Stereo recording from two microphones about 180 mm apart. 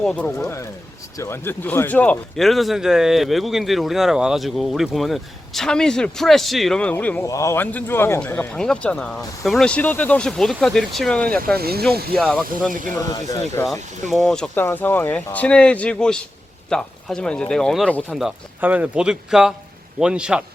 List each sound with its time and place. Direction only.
0.0 s speech: 5° left (ahead or behind)
11.5 s speech: 60° right (ahead or behind)
12.1 s speech: centre (ahead or behind)
13.0 s speech: 20° left (ahead or behind)
13.7 s speech: centre (ahead or behind)